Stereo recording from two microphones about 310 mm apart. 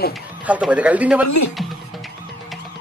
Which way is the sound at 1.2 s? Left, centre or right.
Left.